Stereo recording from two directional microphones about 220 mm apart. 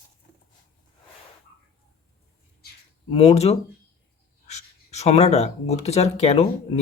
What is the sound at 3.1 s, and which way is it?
Speech, 30° left (ahead or behind).